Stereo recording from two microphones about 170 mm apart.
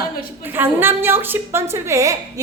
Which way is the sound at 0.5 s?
10° right (ahead or behind).